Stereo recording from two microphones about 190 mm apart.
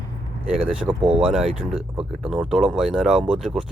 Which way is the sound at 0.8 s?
25° right (ahead or behind).